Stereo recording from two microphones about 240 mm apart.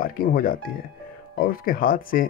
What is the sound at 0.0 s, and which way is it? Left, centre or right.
Speech, left.